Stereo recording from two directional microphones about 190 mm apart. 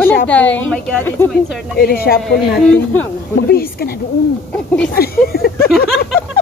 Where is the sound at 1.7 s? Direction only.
55° left (ahead or behind).